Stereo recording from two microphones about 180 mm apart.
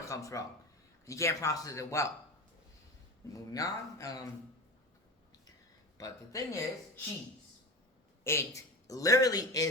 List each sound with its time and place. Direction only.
0.0 s speech: 15° left (ahead or behind)
3.5 s a man's voice: 20° left (ahead or behind)
6.0 s speech: 20° left (ahead or behind)
8.2 s a man's voice: 15° left (ahead or behind)